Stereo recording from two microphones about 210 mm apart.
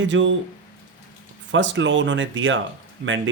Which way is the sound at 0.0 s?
60° right (ahead or behind).